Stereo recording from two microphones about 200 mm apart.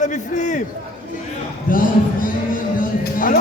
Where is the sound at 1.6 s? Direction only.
45° left (ahead or behind).